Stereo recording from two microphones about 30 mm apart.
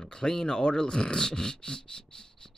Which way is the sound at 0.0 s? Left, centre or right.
Left.